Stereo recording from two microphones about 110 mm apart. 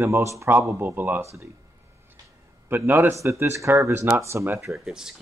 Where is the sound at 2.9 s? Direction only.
20° right (ahead or behind).